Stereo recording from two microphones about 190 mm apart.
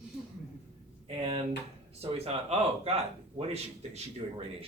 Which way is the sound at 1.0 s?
30° right (ahead or behind).